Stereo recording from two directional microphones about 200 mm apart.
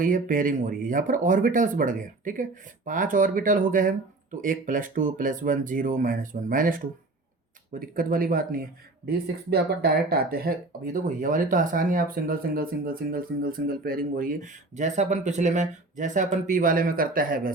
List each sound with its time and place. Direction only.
0.0 s speech: 40° right (ahead or behind)